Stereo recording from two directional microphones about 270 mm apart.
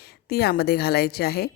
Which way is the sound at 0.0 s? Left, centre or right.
Left.